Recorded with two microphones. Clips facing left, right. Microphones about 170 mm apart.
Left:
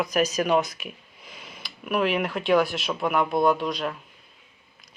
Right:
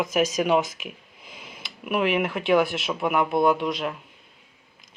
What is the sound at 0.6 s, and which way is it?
Speech, 90° right.